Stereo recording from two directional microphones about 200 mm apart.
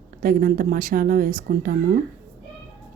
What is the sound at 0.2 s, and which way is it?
A woman's voice, 45° right (ahead or behind).